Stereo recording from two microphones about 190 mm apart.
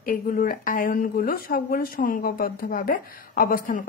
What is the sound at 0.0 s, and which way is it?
A woman's voice, 45° left (ahead or behind).